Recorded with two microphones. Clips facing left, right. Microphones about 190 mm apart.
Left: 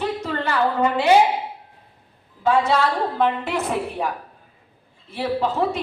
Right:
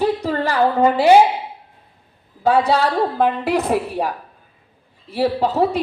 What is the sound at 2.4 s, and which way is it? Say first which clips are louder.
A woman's voice: right 3 dB; 35° right (ahead or behind).